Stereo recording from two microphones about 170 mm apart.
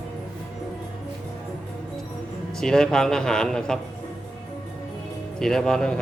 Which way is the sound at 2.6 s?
5° left (ahead or behind).